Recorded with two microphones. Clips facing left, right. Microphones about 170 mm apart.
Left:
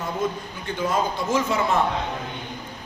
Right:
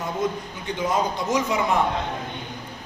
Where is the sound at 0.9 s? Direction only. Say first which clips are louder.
Even; 15° right (ahead or behind).